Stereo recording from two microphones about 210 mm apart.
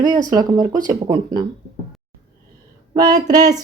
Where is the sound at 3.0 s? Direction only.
20° right (ahead or behind).